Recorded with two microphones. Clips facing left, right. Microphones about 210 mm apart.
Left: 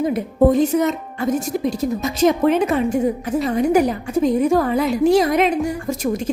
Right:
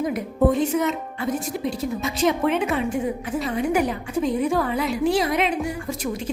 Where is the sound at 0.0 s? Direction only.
35° left (ahead or behind).